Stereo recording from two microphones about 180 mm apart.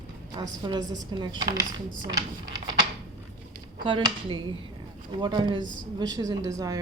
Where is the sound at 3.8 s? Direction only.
25° right (ahead or behind).